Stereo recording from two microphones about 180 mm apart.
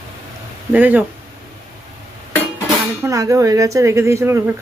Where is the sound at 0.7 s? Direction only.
10° right (ahead or behind).